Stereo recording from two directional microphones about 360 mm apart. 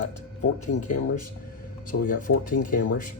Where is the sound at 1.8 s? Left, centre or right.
Left.